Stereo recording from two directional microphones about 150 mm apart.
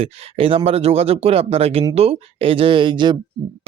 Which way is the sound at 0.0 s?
40° right (ahead or behind).